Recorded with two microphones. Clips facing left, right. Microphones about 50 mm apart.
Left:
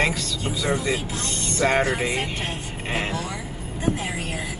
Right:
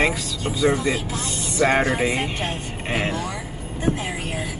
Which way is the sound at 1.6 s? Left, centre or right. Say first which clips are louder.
Right 2 dB; centre.